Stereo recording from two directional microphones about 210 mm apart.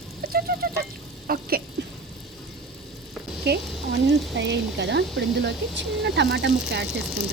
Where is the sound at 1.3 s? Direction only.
45° right (ahead or behind).